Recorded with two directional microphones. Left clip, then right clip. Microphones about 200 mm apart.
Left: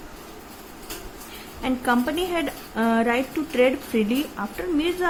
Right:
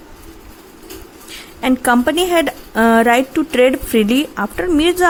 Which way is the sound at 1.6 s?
50° right (ahead or behind).